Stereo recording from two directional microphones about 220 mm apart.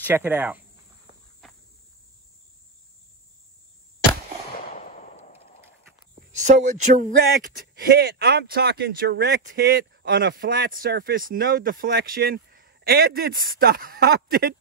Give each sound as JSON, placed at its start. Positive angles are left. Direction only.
{"t": 0.0, "sound": "speech", "side_deg": -10}
{"t": 4.7, "sound": "fireworks", "side_deg": 30}
{"t": 6.3, "sound": "speech", "side_deg": -35}